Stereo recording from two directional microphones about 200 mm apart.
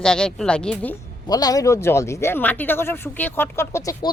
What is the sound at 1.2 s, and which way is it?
Speech, 20° left (ahead or behind).